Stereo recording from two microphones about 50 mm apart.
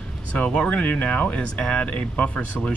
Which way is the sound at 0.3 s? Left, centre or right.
Left.